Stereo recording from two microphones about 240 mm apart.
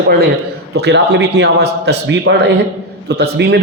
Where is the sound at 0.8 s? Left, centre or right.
Right.